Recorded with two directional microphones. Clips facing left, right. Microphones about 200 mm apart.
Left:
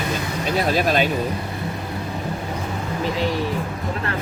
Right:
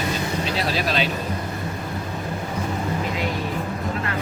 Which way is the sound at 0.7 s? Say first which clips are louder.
Left 5 dB; 50° left (ahead or behind).